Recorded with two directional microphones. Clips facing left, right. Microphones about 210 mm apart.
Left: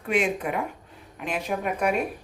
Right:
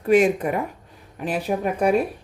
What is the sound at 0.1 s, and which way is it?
Speech, 40° right (ahead or behind).